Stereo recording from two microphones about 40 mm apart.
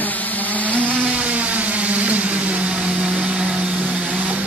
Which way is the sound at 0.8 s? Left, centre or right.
Right.